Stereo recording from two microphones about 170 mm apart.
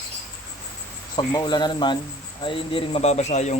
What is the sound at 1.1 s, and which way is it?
A man's voice, 25° left (ahead or behind).